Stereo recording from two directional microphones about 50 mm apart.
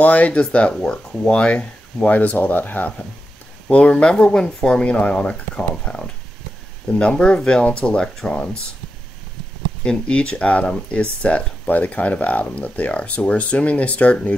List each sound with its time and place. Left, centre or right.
0.0 s speech: left
2.0 s speech: left
3.6 s speech: left
9.8 s speech: centre